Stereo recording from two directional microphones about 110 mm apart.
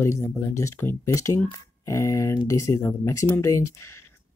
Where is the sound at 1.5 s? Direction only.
30° left (ahead or behind).